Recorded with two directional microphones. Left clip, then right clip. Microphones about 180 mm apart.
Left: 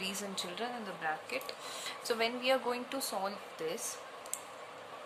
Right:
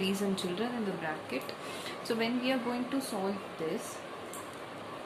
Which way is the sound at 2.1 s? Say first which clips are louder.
Left 1 dB; 40° left (ahead or behind).